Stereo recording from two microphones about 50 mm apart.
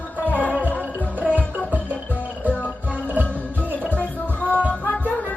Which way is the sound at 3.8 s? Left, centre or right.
Left.